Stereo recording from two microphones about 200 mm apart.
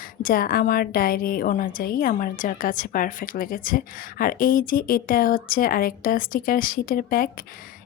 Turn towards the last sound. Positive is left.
turn(degrees=45)  # may be behind; listen again after turning